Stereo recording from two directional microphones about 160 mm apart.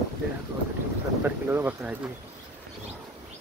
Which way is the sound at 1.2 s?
10° right (ahead or behind).